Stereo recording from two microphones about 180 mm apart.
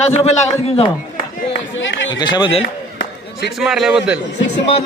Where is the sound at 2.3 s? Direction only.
25° left (ahead or behind).